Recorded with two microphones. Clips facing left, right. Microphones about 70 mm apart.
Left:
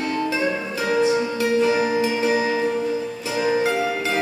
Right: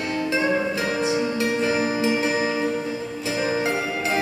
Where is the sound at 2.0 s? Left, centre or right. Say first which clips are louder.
Left 2 dB; right.